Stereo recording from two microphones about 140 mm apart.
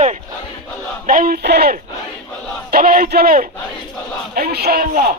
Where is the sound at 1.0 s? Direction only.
75° right (ahead or behind).